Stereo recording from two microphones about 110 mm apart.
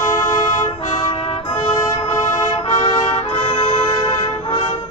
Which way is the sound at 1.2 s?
60° left (ahead or behind).